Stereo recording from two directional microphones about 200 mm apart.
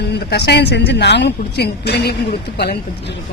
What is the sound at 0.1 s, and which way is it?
Speech, 55° left (ahead or behind).